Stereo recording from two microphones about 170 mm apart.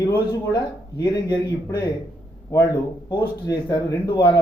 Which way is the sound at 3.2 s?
20° left (ahead or behind).